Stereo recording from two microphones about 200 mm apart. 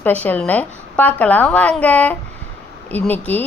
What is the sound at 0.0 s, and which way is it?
A woman's voice, 10° left (ahead or behind).